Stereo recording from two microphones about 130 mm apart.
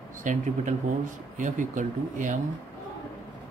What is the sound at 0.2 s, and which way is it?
Speech, 75° right (ahead or behind).